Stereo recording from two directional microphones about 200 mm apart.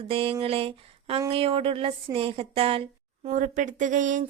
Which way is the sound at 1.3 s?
30° right (ahead or behind).